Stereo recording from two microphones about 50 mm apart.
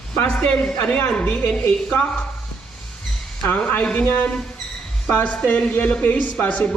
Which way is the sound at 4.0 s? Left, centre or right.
Left.